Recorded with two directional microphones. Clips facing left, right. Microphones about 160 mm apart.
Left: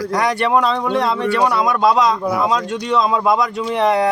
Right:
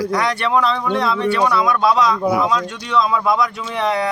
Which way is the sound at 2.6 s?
20° left (ahead or behind).